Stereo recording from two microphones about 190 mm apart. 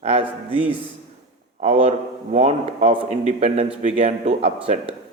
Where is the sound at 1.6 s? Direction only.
35° right (ahead or behind).